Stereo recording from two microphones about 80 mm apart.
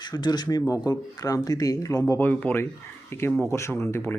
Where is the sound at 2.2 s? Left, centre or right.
Left.